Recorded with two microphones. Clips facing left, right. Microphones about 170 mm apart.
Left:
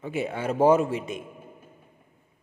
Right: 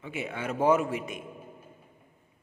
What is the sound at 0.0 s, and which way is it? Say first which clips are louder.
A man's voice: left 6 dB; 35° left (ahead or behind).